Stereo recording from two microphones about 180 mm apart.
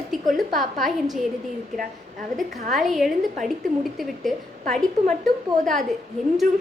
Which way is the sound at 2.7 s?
Centre (ahead or behind).